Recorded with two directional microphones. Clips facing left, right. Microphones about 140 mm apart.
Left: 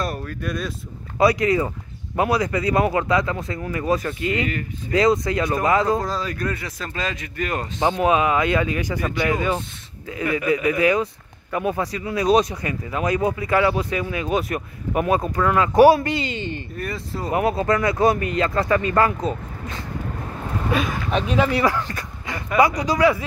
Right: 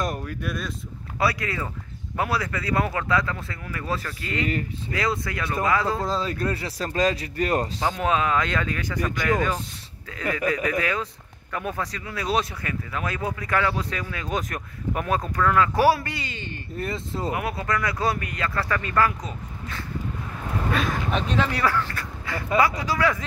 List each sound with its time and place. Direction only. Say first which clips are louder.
0.0 s speech: left 2 dB; 15° right (ahead or behind)
1.1 s speech: left 8 dB; 20° left (ahead or behind)
6.0 s a man's voice: even; 25° right (ahead or behind)
7.8 s speech: left 10 dB; 15° left (ahead or behind)
16.7 s speech: left 1 dB; 25° right (ahead or behind)
17.3 s speech: left 8 dB; 30° left (ahead or behind)
20.7 s speech: left 4 dB; 5° left (ahead or behind)